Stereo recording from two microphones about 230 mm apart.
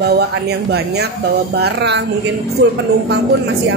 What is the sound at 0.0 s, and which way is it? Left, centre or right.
A woman's voice, right.